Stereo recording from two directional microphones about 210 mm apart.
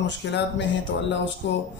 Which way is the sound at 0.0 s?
55° left (ahead or behind).